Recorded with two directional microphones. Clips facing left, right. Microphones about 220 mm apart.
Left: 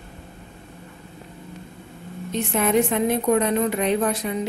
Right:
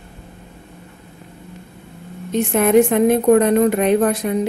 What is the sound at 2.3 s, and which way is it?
A woman's voice, 50° right (ahead or behind).